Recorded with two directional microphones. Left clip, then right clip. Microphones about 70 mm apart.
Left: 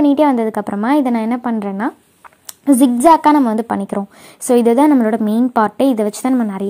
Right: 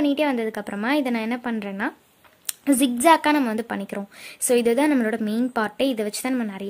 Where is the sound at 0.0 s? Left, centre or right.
Left.